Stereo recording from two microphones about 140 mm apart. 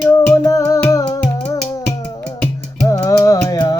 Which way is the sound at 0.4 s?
25° left (ahead or behind).